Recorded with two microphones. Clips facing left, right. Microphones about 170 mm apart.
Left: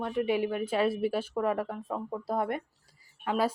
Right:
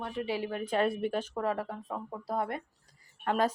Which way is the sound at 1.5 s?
25° left (ahead or behind).